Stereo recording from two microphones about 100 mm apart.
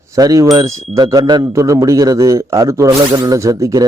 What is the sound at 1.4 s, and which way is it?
Speech, 30° right (ahead or behind).